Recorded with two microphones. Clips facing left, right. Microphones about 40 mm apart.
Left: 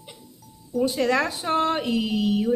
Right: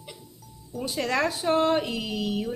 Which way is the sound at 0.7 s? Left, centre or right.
Centre.